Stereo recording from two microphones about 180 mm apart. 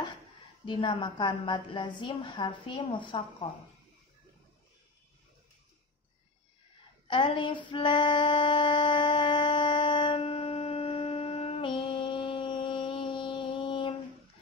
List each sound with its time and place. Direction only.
0.7 s a woman's voice: 25° left (ahead or behind)
7.1 s female singing: 25° left (ahead or behind)